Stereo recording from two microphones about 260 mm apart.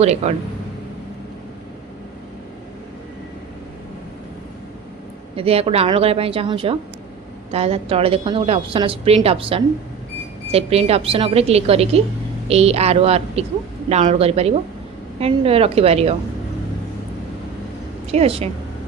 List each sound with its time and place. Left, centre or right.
0.0 s a woman's voice: right
5.4 s a woman's voice: right
18.1 s a woman's voice: right